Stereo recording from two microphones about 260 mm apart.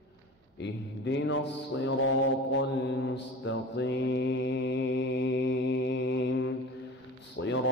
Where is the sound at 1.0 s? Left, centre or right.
Left.